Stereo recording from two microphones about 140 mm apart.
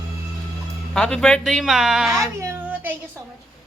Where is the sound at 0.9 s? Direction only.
5° left (ahead or behind).